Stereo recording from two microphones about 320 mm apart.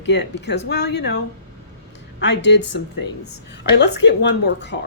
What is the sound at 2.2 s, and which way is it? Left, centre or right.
Speech, left.